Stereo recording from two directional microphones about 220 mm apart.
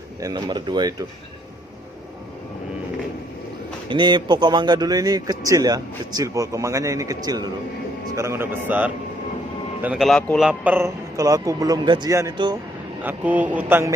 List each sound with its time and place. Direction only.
0.2 s speech: 15° right (ahead or behind)
3.8 s a man's voice: 20° right (ahead or behind)